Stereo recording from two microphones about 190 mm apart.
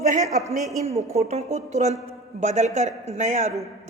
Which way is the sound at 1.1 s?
35° right (ahead or behind).